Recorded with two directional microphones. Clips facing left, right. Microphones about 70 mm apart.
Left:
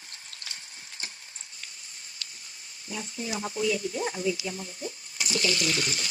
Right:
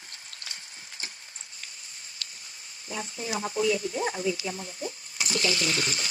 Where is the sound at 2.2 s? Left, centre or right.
Right.